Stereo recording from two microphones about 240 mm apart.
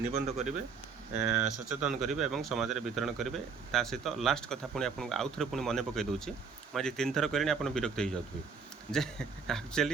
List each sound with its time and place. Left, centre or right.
0.0 s speech: right
1.2 s speech: centre